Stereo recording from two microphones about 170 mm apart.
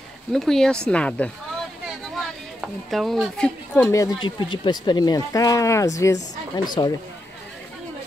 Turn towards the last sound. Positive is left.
turn(degrees=25)  # may be behind; listen again after turning